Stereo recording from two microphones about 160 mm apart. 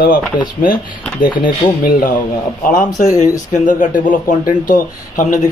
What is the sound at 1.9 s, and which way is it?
A man's voice, 60° left (ahead or behind).